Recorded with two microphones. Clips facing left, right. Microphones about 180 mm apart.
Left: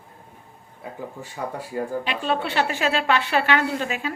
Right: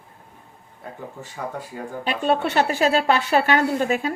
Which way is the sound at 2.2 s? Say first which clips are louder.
Right 5 dB; 45° right (ahead or behind).